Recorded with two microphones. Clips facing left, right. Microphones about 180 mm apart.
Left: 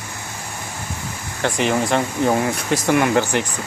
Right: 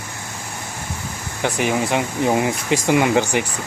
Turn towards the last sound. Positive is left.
turn(degrees=-15)  # may be behind; listen again after turning